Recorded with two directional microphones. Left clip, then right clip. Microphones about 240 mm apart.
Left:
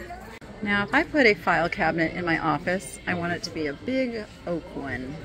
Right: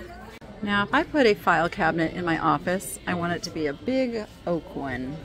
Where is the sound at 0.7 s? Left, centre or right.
Centre.